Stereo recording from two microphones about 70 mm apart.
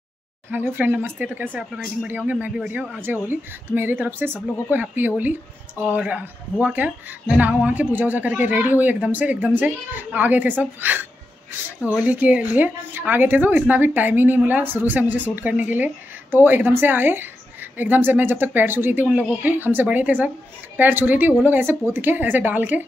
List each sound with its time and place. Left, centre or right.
0.5 s a woman's voice: right; by 3.0 s centre
3.0 s a woman's voice: right
12.1 s a woman's voice: centre
19.0 s speech: centre
19.4 s a woman's voice: right